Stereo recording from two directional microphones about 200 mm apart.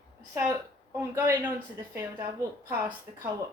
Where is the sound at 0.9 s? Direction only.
15° right (ahead or behind).